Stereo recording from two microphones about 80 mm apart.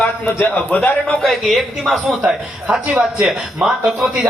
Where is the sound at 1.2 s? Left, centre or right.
Centre.